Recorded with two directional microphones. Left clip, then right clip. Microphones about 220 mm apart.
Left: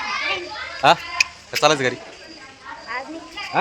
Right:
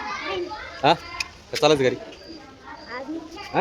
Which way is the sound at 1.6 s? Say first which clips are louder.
Left 1 dB; 5° left (ahead or behind).